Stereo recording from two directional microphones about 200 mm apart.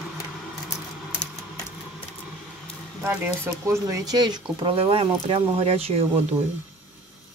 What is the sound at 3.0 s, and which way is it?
Speech, 5° right (ahead or behind).